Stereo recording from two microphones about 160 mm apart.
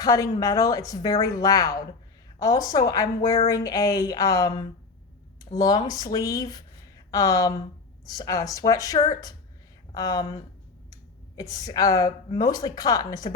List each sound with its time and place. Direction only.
0.0 s speech: 20° left (ahead or behind)
3.3 s a sound: 35° left (ahead or behind)
3.6 s speech: 20° left (ahead or behind)